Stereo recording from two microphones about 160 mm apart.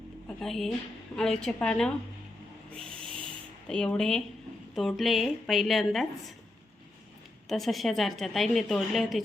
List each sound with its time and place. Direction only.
0.3 s a woman's voice: centre (ahead or behind)
2.7 s owl: 5° left (ahead or behind)
3.7 s a woman's voice: 5° left (ahead or behind)
7.4 s a woman's voice: centre (ahead or behind)